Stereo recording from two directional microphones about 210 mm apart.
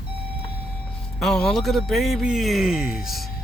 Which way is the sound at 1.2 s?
Centre (ahead or behind).